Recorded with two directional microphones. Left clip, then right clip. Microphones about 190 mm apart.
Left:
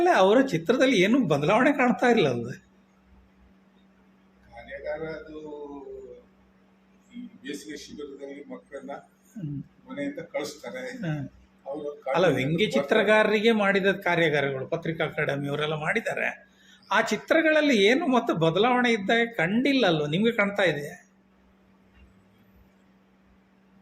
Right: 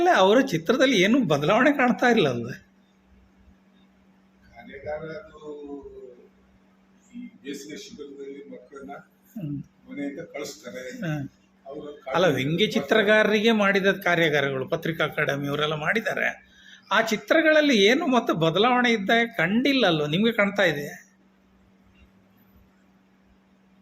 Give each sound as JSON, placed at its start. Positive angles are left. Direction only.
{"t": 0.0, "sound": "speech", "side_deg": -15}
{"t": 12.1, "sound": "speech", "side_deg": -15}